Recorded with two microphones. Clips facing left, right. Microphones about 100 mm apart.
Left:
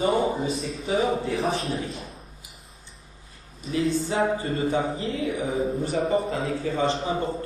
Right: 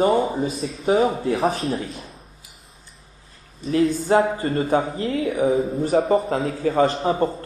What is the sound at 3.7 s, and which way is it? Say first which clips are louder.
A man's voice: right 7 dB; 50° right (ahead or behind).